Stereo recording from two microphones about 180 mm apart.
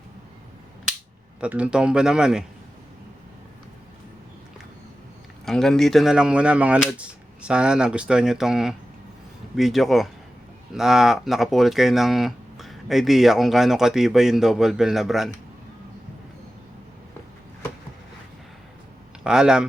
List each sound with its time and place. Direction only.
1.4 s speech: 5° right (ahead or behind)
5.5 s speech: centre (ahead or behind)
19.2 s speech: 5° right (ahead or behind)